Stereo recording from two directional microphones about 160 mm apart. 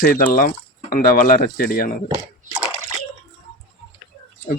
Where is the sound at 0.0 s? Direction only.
60° left (ahead or behind).